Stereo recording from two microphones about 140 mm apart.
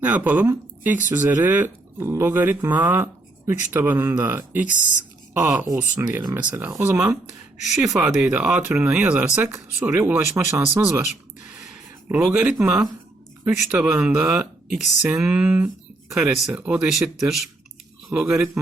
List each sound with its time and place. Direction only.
0.0 s speech: 10° right (ahead or behind)
4.7 s speech: 65° left (ahead or behind)
5.7 s speech: 10° right (ahead or behind)
6.9 s speech: 5° right (ahead or behind)
12.0 s speech: 10° right (ahead or behind)